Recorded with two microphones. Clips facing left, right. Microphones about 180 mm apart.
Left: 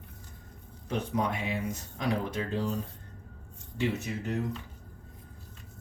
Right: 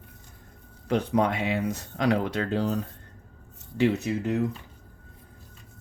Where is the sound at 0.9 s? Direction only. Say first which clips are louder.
Right 7 dB; 85° right.